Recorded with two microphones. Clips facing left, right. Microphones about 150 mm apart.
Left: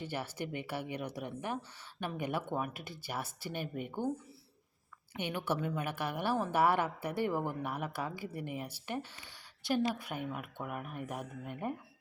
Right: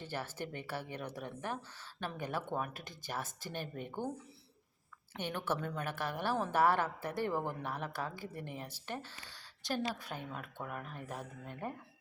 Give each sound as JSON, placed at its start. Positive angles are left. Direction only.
{"t": 0.0, "sound": "a woman's voice", "side_deg": 15}
{"t": 5.1, "sound": "a woman's voice", "side_deg": 10}